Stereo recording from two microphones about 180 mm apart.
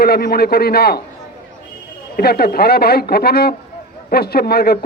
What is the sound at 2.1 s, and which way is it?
A man's voice, 60° left (ahead or behind).